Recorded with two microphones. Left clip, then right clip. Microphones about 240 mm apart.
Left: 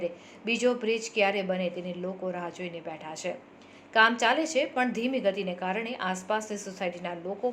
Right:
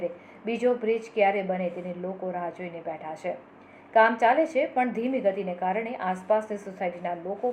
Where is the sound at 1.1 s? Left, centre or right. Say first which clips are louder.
Right 3 dB; left.